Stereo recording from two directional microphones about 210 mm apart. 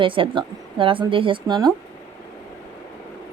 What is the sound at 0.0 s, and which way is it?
A woman's voice, 25° right (ahead or behind).